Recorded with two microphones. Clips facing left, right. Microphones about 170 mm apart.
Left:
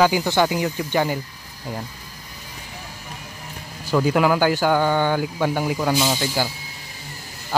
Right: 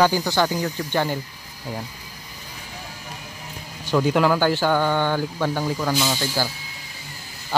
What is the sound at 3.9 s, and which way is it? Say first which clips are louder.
Speech: left 1 dB; 5° left (ahead or behind).